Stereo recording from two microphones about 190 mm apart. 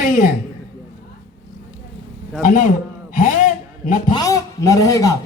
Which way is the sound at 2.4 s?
45° left (ahead or behind).